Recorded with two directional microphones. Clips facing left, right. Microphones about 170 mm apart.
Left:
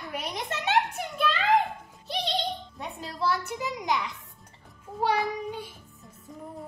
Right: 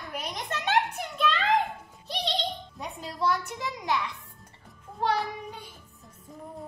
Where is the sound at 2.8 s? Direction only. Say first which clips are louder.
Right 2 dB; centre (ahead or behind); by 4.1 s 15° left (ahead or behind).